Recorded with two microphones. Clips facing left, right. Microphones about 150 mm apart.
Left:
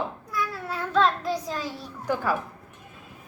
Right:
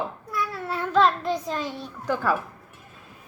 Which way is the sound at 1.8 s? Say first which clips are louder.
Right 1 dB; 10° left (ahead or behind).